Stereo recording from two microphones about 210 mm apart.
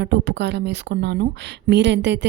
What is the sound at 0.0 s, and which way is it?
Speech, 55° right (ahead or behind).